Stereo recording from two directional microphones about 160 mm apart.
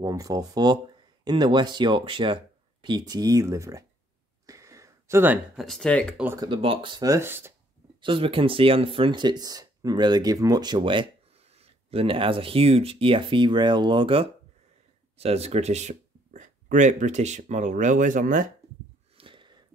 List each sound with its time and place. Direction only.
0.0 s speech: 20° right (ahead or behind)
4.5 s a sound: 20° right (ahead or behind)
5.6 s speech: centre (ahead or behind)
6.3 s speech: 30° right (ahead or behind)
8.0 s speech: 35° right (ahead or behind); by 18.5 s 55° right (ahead or behind)
19.1 s a sound: 30° right (ahead or behind)